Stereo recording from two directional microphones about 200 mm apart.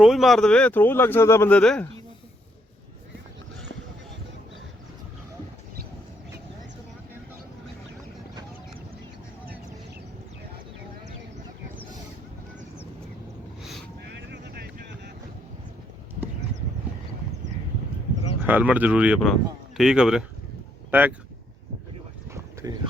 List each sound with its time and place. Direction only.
0.0 s speech: centre (ahead or behind)
13.6 s vehicle: centre (ahead or behind)
14.2 s vehicle: 60° right (ahead or behind)
18.4 s speech: 10° right (ahead or behind)
22.6 s speech: 15° right (ahead or behind)